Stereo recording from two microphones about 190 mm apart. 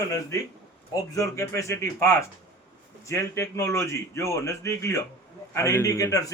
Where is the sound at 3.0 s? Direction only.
15° left (ahead or behind).